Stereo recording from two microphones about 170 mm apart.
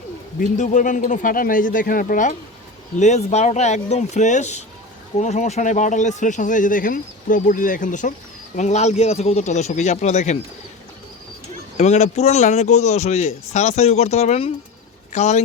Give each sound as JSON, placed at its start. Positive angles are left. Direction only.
{"t": 0.3, "sound": "a man's voice", "side_deg": 50}
{"t": 11.8, "sound": "a man's voice", "side_deg": 40}